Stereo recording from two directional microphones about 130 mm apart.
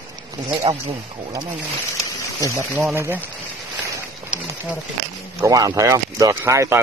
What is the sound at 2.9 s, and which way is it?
Speech, 20° right (ahead or behind).